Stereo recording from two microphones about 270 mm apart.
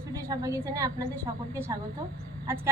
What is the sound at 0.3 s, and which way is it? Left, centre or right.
A woman's voice, centre.